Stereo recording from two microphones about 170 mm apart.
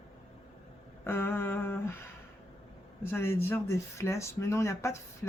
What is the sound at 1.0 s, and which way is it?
Speech, 10° left (ahead or behind).